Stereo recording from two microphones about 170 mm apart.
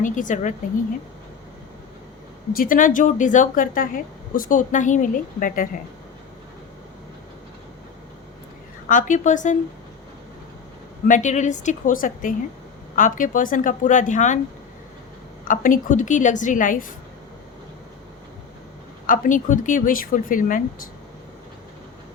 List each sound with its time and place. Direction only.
0.0 s speech: 50° left (ahead or behind)
2.5 s speech: 55° left (ahead or behind)
8.9 s speech: 50° left (ahead or behind)
11.1 s speech: 45° left (ahead or behind)
15.4 s speech: 50° left (ahead or behind)
19.0 s speech: 50° left (ahead or behind)